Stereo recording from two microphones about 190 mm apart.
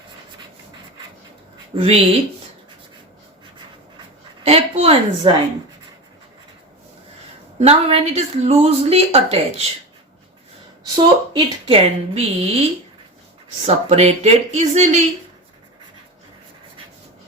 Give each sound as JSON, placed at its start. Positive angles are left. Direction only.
{"t": 1.7, "sound": "speech", "side_deg": -30}
{"t": 4.4, "sound": "a woman's voice", "side_deg": -30}
{"t": 7.6, "sound": "a woman's voice", "side_deg": -30}
{"t": 10.9, "sound": "speech", "side_deg": -20}
{"t": 13.7, "sound": "a woman's voice", "side_deg": -35}